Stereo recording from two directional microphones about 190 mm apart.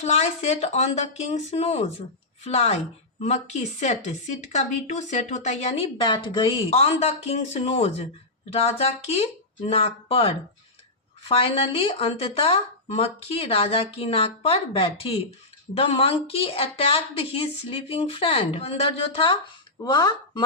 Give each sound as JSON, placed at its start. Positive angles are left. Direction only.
{"t": 0.0, "sound": "a woman's voice", "side_deg": 35}